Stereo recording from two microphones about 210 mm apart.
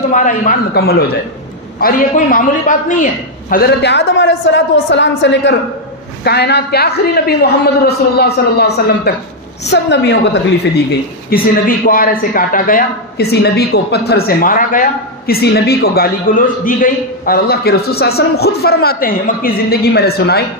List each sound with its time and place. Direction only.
0.1 s a man's voice: 35° left (ahead or behind)